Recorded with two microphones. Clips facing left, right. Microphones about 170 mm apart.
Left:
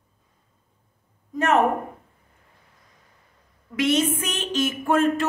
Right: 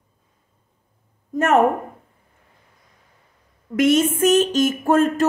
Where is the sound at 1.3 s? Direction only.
45° right (ahead or behind).